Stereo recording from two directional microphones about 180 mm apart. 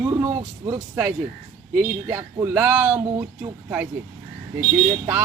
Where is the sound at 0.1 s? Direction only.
15° right (ahead or behind).